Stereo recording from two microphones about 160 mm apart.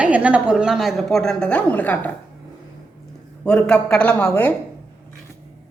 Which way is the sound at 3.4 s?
5° left (ahead or behind).